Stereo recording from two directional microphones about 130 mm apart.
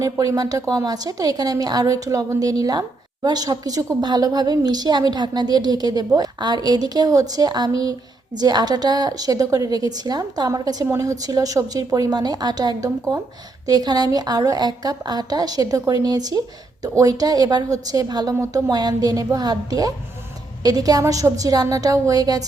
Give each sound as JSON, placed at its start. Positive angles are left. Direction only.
{"t": 0.0, "sound": "a woman's voice", "side_deg": -25}